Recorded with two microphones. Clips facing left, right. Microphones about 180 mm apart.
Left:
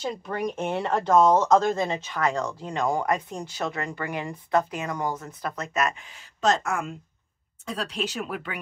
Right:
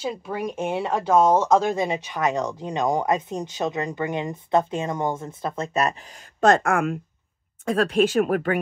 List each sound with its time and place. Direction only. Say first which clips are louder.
0.0 s speech: right 1 dB; 5° right (ahead or behind); by 5.9 s 30° right (ahead or behind)
6.4 s speech: right 6 dB; 55° right (ahead or behind)